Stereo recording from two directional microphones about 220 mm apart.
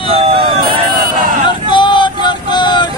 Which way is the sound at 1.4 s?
20° left (ahead or behind).